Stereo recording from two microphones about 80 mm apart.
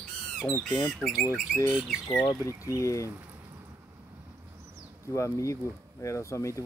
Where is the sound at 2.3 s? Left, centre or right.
Left.